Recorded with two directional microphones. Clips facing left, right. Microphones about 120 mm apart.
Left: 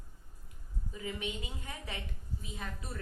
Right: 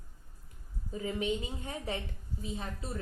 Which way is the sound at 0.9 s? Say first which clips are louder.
Right 7 dB; 35° right (ahead or behind).